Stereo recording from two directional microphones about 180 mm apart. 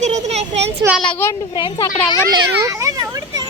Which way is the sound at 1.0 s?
10° left (ahead or behind).